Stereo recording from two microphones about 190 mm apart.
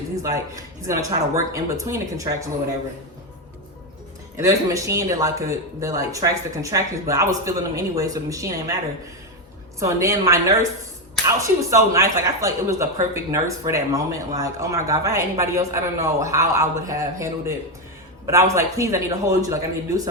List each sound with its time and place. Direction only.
0.2 s speech: 15° right (ahead or behind)
4.4 s speech: 15° right (ahead or behind)
9.8 s speech: 15° right (ahead or behind)